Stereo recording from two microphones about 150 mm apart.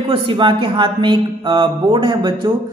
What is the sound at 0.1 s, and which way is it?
Speech, 35° right (ahead or behind).